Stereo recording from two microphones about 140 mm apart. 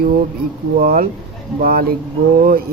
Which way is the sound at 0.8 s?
75° right (ahead or behind).